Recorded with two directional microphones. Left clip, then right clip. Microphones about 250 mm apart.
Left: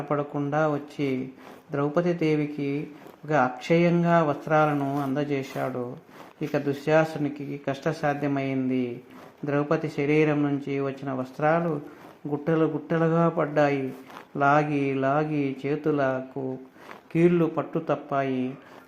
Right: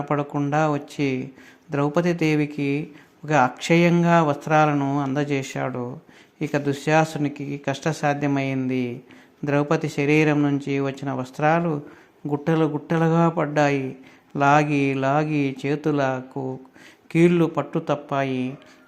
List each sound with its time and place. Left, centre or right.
0.1 s speech: right